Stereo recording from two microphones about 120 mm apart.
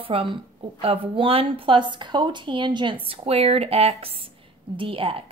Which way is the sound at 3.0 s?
55° right (ahead or behind).